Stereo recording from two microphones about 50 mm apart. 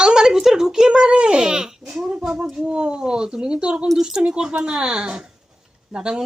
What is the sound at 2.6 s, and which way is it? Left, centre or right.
Speech, centre.